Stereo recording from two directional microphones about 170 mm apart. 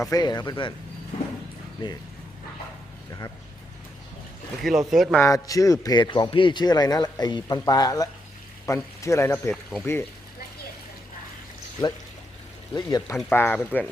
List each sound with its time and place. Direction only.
0.0 s a man's voice: 20° left (ahead or behind)
1.8 s a man's voice: 30° left (ahead or behind)
4.6 s speech: centre (ahead or behind)
5.2 s a man's voice: 20° left (ahead or behind)
12.7 s a man's voice: 20° left (ahead or behind)